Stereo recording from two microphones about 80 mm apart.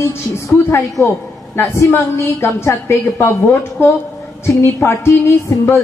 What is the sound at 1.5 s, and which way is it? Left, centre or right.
A woman's voice, left.